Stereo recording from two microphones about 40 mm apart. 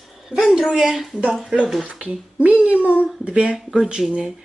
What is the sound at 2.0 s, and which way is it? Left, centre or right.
A child's voice, right.